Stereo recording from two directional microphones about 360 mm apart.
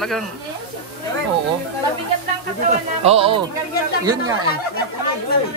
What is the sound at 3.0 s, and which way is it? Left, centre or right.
Speech, centre.